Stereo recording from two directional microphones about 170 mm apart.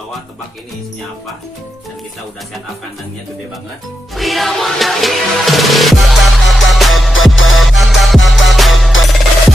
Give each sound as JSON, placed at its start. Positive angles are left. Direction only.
{"t": 4.1, "sound": "music", "side_deg": 0}